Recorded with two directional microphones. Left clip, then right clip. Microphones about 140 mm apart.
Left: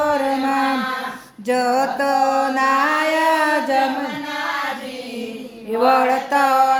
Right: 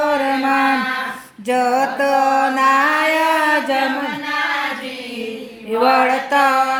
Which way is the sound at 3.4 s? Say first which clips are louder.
Right 2 dB; 10° right (ahead or behind).